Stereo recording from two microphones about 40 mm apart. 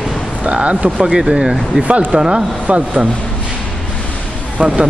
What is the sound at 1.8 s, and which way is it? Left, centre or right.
Speech, right.